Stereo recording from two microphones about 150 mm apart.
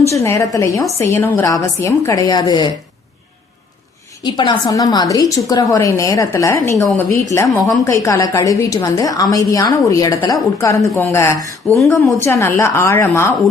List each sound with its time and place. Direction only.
0.1 s a woman's voice: 20° left (ahead or behind)
4.2 s a woman's voice: 30° left (ahead or behind)